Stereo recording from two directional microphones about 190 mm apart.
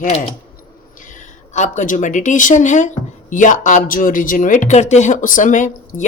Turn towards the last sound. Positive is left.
turn(degrees=40)  # may be behind; listen again after turning